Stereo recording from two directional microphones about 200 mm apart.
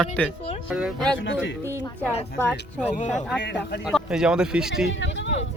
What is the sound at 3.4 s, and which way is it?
Speech, 60° left (ahead or behind).